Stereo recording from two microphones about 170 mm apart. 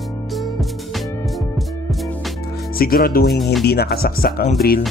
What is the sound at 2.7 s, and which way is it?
Speech, 60° left (ahead or behind).